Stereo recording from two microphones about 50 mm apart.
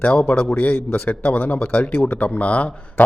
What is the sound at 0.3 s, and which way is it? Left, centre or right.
Speech, left.